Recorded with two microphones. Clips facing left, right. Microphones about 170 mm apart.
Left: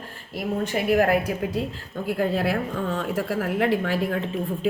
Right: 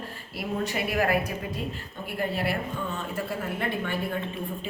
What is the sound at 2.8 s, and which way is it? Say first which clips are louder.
Speech: left 6 dB; 90° left.